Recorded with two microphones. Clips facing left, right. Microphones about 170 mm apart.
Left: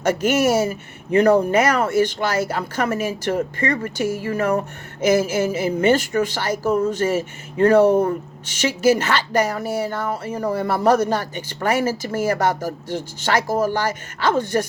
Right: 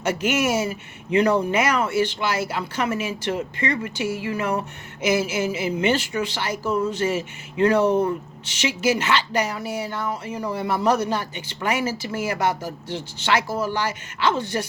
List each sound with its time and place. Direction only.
0.0 s speech: 45° left (ahead or behind)